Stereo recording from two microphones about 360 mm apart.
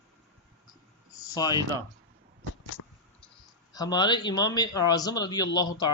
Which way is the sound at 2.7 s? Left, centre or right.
Left.